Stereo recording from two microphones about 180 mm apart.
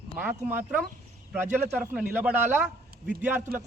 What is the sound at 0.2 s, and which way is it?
A man's voice, 10° right (ahead or behind).